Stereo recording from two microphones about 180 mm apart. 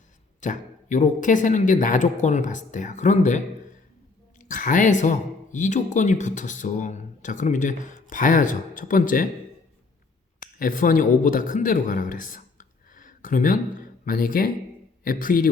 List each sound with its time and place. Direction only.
0.3 s speech: 45° left (ahead or behind)
10.4 s speech: 50° left (ahead or behind)